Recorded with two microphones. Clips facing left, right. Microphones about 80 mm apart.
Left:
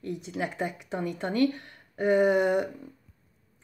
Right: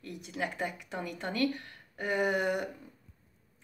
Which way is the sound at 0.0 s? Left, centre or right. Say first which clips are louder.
Left 4 dB; left.